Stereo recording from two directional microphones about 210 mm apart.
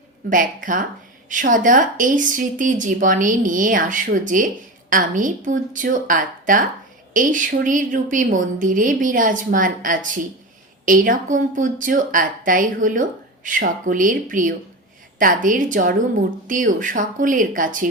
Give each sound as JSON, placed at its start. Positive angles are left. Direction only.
{"t": 0.3, "sound": "a woman's voice", "side_deg": -40}